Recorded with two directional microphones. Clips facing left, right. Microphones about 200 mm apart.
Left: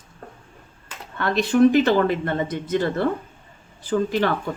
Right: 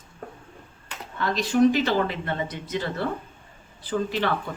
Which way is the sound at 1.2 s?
60° left (ahead or behind).